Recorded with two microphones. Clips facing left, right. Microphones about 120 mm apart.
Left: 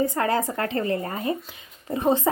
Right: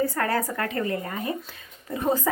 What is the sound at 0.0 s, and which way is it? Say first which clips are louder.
A woman's voice: left 2 dB; 20° left (ahead or behind).